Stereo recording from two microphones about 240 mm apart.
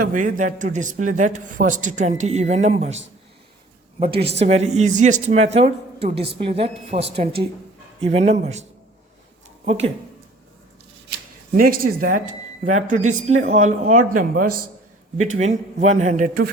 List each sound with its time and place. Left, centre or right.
0.0 s speech: right
4.0 s speech: right
9.6 s speech: right
11.5 s speech: right